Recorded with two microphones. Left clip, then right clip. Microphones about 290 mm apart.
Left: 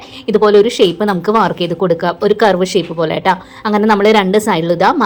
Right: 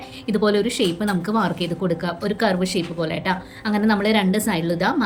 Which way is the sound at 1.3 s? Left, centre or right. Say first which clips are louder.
Left 11 dB; left.